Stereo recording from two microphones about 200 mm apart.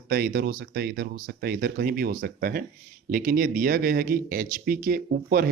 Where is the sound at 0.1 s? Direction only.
45° right (ahead or behind).